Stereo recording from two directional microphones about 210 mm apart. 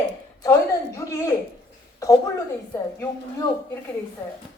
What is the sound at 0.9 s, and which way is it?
Speech, 15° left (ahead or behind).